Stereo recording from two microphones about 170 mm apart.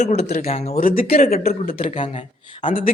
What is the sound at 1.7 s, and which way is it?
A woman's voice, 30° left (ahead or behind).